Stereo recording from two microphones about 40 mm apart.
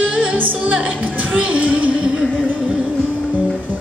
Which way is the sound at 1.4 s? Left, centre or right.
Right.